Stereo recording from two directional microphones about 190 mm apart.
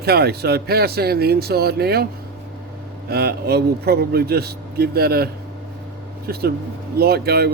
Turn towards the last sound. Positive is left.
turn(degrees=-55)  # may be behind; listen again after turning